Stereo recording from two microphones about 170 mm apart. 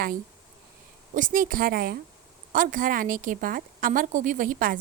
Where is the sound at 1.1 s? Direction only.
50° right (ahead or behind).